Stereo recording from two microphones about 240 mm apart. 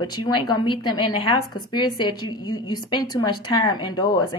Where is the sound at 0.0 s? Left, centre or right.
Centre.